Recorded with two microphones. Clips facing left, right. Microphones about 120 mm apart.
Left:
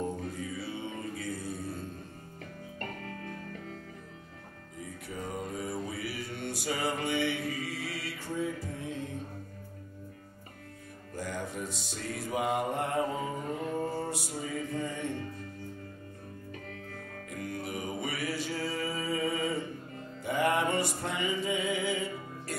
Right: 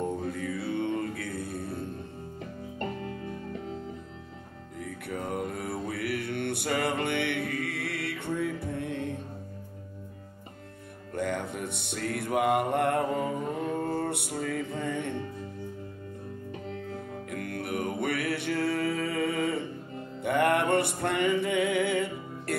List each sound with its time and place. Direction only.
0.3 s mantra: 60° right (ahead or behind)
2.8 s music: 20° right (ahead or behind)
4.7 s music: 60° right (ahead or behind)
11.1 s music: 60° right (ahead or behind)
16.6 s music: 20° right (ahead or behind)
17.3 s music: 60° right (ahead or behind)